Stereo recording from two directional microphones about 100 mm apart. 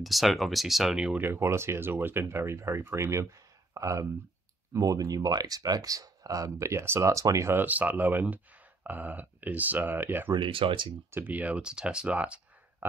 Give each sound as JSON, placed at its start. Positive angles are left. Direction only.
{"t": 0.0, "sound": "speech", "side_deg": 0}
{"t": 1.2, "sound": "speech", "side_deg": -25}
{"t": 7.6, "sound": "speech", "side_deg": -15}
{"t": 10.3, "sound": "speech", "side_deg": -55}
{"t": 11.1, "sound": "speech", "side_deg": -20}